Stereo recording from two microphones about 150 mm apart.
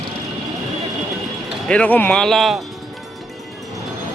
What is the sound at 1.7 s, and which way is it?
Speech, 10° left (ahead or behind).